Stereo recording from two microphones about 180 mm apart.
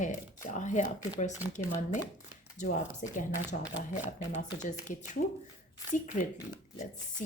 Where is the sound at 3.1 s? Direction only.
45° left (ahead or behind).